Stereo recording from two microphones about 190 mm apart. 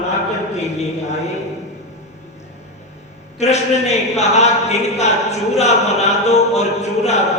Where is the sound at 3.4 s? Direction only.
35° left (ahead or behind).